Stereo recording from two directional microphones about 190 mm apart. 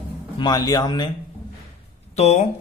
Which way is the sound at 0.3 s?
20° left (ahead or behind).